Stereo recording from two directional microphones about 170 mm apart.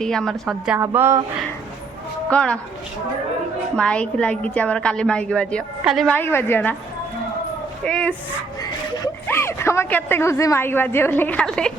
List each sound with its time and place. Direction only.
0.0 s a woman's voice: 5° left (ahead or behind)
0.8 s speech: 15° right (ahead or behind)
2.3 s a woman's voice: 5° left (ahead or behind)
3.8 s a woman's voice: 5° left (ahead or behind)
6.1 s a woman's voice: 10° left (ahead or behind)
7.9 s speech: 5° left (ahead or behind)
9.2 s a woman's voice: 15° left (ahead or behind)